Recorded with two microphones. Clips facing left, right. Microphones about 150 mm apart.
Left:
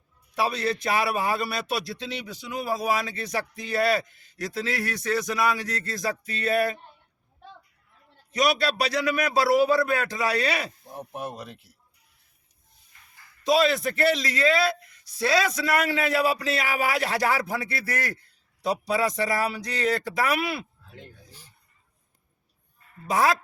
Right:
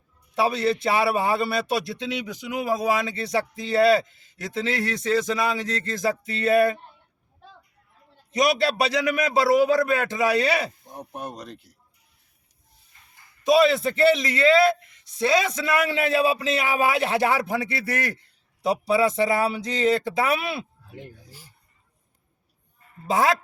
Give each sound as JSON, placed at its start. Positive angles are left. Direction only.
{"t": 0.3, "sound": "a man's voice", "side_deg": -25}
{"t": 8.3, "sound": "a man's voice", "side_deg": -25}
{"t": 10.9, "sound": "speech", "side_deg": 5}
{"t": 13.5, "sound": "a man's voice", "side_deg": -25}
{"t": 20.9, "sound": "a sound", "side_deg": -10}
{"t": 23.0, "sound": "a man's voice", "side_deg": -25}